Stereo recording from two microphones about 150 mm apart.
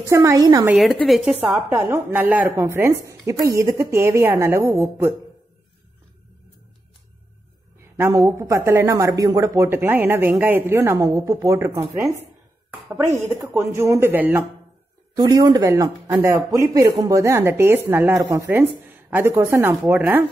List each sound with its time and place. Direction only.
0.1 s speech: 20° right (ahead or behind)
0.7 s a woman's voice: centre (ahead or behind)
1.9 s a man's voice: 15° right (ahead or behind)
8.0 s a woman's voice: 20° right (ahead or behind)
15.1 s a man's voice: 25° right (ahead or behind)